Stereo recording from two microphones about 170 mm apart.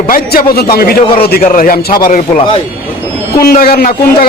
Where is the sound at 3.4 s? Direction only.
60° left (ahead or behind).